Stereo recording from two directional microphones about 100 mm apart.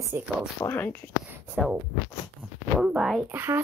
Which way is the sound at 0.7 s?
20° left (ahead or behind).